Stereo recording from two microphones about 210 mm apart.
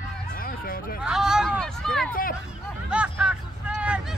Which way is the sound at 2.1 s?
40° left (ahead or behind).